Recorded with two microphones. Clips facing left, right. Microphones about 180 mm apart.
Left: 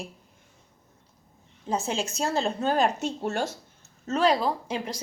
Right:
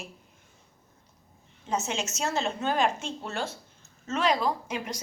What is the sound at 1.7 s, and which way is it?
Speech, 30° left (ahead or behind).